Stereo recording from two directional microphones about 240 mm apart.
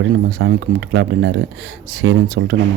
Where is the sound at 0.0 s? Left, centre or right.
Right.